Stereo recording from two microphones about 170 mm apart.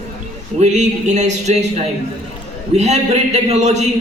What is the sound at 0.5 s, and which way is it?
A man's voice, 40° right (ahead or behind).